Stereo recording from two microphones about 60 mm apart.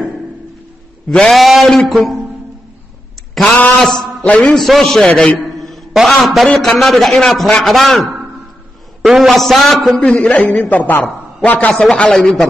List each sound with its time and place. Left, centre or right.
1.0 s a man's voice: centre
3.4 s a man's voice: left
4.6 s a man's voice: centre
5.6 s a sound: centre
6.6 s a man's voice: centre
9.9 s a man's voice: centre
11.7 s a man's voice: centre